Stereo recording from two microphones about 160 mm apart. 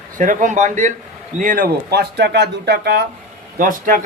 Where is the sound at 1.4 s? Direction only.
60° right (ahead or behind); by 3.0 s 90° right.